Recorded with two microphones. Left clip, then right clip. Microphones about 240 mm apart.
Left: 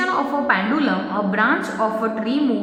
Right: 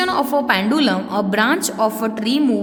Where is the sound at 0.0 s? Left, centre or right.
Right.